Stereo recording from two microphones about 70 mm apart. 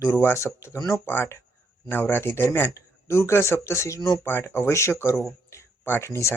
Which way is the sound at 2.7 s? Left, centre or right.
Left.